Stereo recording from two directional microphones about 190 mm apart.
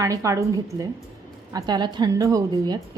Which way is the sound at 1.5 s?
20° right (ahead or behind).